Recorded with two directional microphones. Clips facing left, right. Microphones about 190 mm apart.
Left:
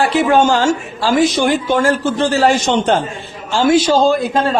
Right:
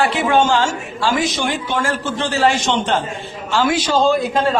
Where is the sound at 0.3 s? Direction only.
40° left (ahead or behind).